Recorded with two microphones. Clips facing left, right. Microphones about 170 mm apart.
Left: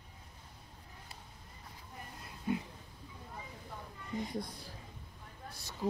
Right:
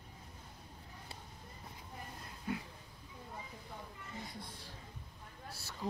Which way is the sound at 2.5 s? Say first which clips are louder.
Left 5 dB; 20° left (ahead or behind).